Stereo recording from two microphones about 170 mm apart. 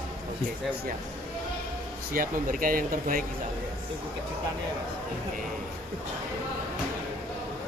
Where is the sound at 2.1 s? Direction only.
55° right (ahead or behind).